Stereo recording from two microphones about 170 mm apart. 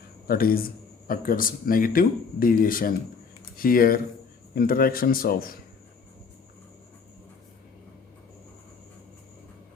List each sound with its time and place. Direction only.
0.3 s speech: 60° left (ahead or behind)